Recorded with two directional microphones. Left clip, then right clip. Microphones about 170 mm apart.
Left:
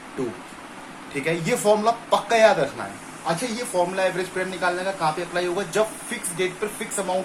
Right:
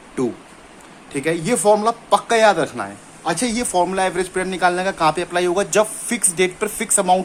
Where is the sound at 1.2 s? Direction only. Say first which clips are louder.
Right 4 dB; 35° right (ahead or behind).